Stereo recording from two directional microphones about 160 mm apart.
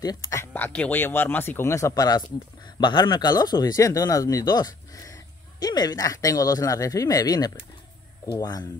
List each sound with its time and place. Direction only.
0.0 s speech: 25° left (ahead or behind)
0.5 s speech: 10° left (ahead or behind)